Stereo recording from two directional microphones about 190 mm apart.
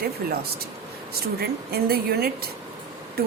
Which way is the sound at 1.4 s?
55° right (ahead or behind).